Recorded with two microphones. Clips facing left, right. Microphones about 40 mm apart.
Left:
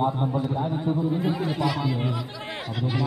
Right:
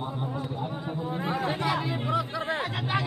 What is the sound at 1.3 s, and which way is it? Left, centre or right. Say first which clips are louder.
Speech: left 1 dB; right.